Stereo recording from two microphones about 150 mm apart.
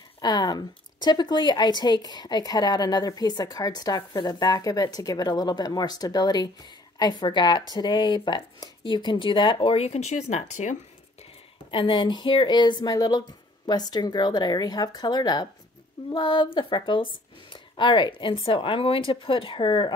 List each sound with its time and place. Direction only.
0.2 s a woman's voice: 25° left (ahead or behind); by 10.8 s 50° left (ahead or behind)
11.7 s a woman's voice: 35° left (ahead or behind)